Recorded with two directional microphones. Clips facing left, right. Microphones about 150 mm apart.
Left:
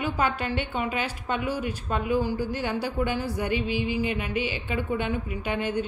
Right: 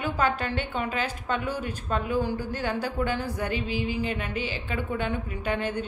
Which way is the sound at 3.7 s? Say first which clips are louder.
Left 2 dB; 45° right (ahead or behind).